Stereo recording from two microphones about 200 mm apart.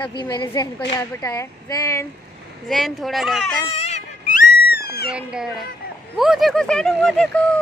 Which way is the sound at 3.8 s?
35° left (ahead or behind).